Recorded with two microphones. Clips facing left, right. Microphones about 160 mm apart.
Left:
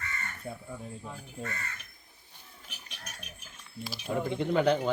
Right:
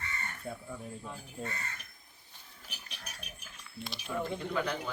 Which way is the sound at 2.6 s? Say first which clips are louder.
Even; centre (ahead or behind).